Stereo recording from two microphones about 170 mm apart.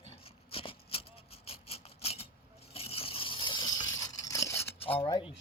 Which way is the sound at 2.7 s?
35° left (ahead or behind).